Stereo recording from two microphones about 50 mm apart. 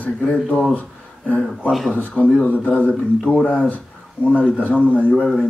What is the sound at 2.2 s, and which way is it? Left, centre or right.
Speech, centre.